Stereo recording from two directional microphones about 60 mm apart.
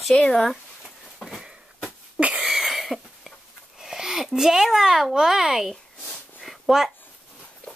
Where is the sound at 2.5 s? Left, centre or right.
Centre.